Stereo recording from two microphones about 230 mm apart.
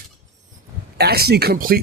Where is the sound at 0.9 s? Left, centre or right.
Right.